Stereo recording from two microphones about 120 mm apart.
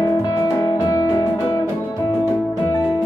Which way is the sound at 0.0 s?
35° left (ahead or behind).